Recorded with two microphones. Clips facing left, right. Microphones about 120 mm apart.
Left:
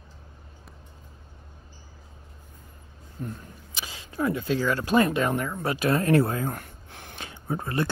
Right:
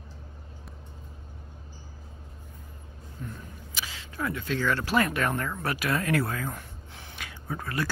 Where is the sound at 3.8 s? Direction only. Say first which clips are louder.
Left 5 dB; 20° left (ahead or behind).